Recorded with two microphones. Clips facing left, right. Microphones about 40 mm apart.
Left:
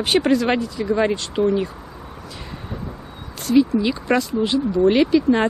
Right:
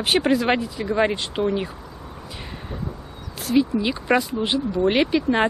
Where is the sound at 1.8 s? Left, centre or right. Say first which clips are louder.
Left 1 dB; centre.